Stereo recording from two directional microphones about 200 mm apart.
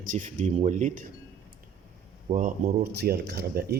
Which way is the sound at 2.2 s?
40° right (ahead or behind).